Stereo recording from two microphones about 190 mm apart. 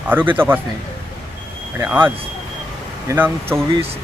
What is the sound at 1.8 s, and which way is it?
Speech, 10° right (ahead or behind).